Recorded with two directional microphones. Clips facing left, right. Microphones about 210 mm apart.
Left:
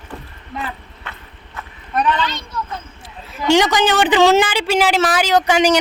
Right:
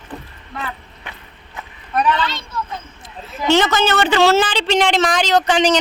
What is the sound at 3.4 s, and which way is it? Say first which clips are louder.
A woman's voice: left 1 dB; 15° left (ahead or behind).